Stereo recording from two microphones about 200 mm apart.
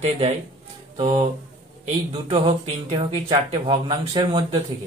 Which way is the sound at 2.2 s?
30° right (ahead or behind).